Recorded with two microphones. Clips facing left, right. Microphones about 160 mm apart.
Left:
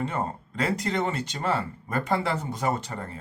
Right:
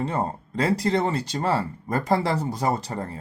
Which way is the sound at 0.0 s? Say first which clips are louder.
Right 3 dB; 35° right (ahead or behind).